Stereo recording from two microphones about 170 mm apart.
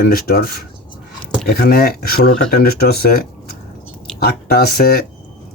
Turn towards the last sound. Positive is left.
turn(degrees=65)  # may be behind; listen again after turning